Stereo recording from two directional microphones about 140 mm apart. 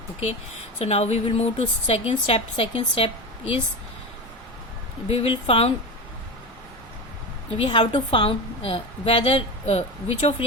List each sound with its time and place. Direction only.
0.8 s a woman's voice: 50° left (ahead or behind)
5.0 s a woman's voice: 45° left (ahead or behind)
7.5 s a woman's voice: 40° left (ahead or behind)